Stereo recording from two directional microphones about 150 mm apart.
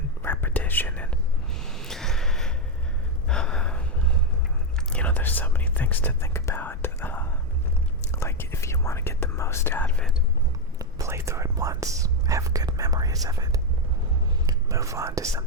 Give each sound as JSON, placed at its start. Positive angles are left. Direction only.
{"t": 0.2, "sound": "whispering", "side_deg": 15}
{"t": 3.2, "sound": "gasp", "side_deg": 5}
{"t": 4.8, "sound": "whispering", "side_deg": 5}
{"t": 10.8, "sound": "whispering", "side_deg": -20}